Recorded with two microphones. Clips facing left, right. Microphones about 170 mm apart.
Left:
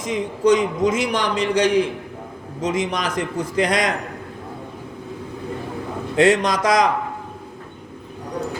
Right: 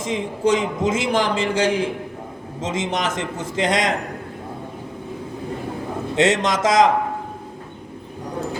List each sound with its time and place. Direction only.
0.0 s a man's voice: 25° right (ahead or behind)
6.1 s a man's voice: 25° right (ahead or behind)